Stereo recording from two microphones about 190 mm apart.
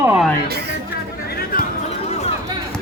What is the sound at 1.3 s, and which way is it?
Chatter, 55° left (ahead or behind).